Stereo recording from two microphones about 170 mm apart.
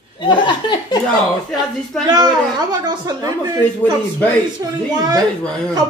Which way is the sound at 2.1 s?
25° right (ahead or behind).